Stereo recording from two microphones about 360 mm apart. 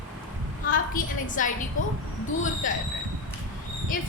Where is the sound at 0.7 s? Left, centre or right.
Left.